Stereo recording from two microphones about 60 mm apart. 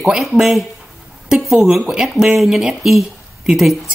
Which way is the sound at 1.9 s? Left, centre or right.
Centre.